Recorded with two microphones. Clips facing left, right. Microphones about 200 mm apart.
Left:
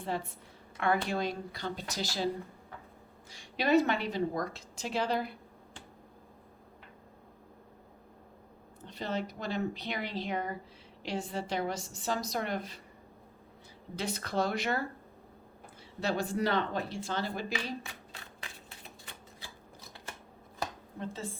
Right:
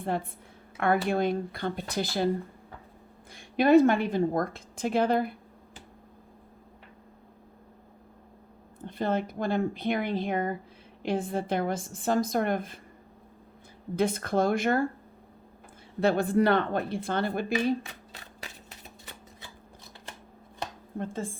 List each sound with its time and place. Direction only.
0.0 s a woman's voice: 55° right (ahead or behind)
3.3 s a woman's voice: 50° right (ahead or behind)
8.8 s a woman's voice: 50° right (ahead or behind)
13.9 s a woman's voice: 50° right (ahead or behind)
16.0 s speech: 55° right (ahead or behind)
21.0 s a woman's voice: 50° right (ahead or behind)